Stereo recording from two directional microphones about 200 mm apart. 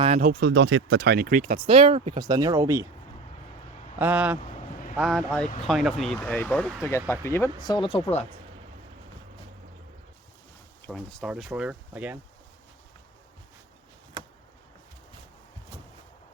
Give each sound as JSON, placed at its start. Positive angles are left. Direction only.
{"t": 0.2, "sound": "speech", "side_deg": -55}
{"t": 1.6, "sound": "speech", "side_deg": -30}
{"t": 2.2, "sound": "speech", "side_deg": -20}
{"t": 3.9, "sound": "speech", "side_deg": -10}
{"t": 10.8, "sound": "speech", "side_deg": 0}